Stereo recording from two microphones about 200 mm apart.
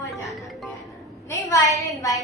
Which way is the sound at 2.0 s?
15° left (ahead or behind).